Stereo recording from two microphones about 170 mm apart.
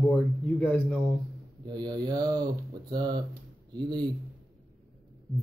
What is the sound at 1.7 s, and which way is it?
Speech, 25° right (ahead or behind).